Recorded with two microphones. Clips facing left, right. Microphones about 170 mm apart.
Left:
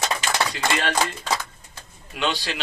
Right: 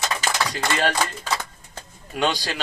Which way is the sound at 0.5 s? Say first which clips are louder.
Right 1 dB; 40° right (ahead or behind).